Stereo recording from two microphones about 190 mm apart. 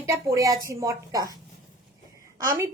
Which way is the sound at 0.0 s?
15° right (ahead or behind).